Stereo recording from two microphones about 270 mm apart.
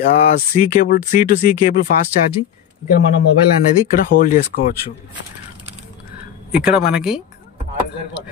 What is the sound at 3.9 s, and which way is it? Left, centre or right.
Speech, left.